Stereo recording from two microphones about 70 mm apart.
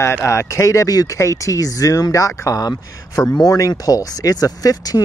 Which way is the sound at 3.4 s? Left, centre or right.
Left.